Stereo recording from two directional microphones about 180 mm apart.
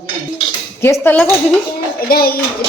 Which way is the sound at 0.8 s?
15° left (ahead or behind).